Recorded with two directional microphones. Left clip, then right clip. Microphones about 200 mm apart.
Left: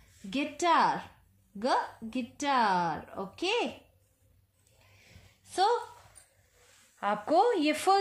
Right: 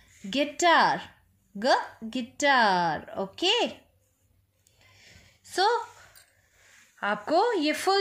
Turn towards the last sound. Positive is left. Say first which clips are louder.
# right 1 dB
turn(degrees=-15)  # may be behind; listen again after turning